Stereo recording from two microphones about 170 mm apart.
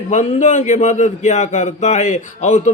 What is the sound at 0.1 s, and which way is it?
A man's voice, 45° left (ahead or behind).